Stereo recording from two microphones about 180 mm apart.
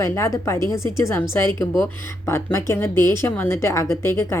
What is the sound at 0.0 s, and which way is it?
Speech, 15° left (ahead or behind).